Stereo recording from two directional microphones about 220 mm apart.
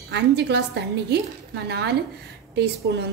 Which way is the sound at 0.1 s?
50° right (ahead or behind).